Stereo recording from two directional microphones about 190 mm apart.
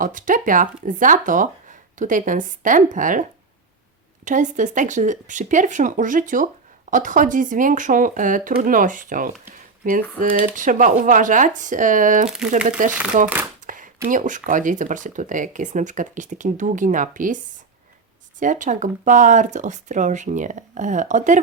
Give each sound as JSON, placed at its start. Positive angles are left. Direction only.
{"t": 0.0, "sound": "speech", "side_deg": -45}
{"t": 4.3, "sound": "speech", "side_deg": -40}